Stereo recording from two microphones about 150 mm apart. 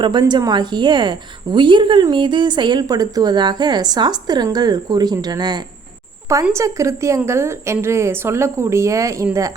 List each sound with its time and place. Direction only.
0.0 s a woman's voice: 30° right (ahead or behind)